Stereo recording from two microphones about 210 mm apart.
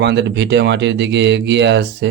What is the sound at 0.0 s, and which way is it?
Speech, 55° right (ahead or behind).